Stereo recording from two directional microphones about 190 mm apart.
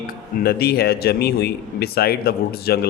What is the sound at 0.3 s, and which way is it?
Speech, 55° left (ahead or behind).